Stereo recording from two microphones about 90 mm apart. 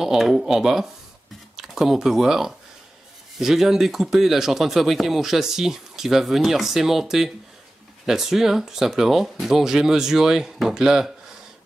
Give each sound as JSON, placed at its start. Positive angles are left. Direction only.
{"t": 0.0, "sound": "speech", "side_deg": -5}